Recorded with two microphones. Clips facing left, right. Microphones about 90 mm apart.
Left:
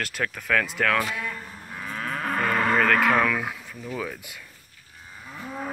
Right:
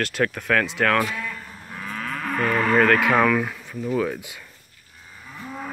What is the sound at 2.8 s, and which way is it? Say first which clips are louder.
Speech: right 4 dB; centre (ahead or behind).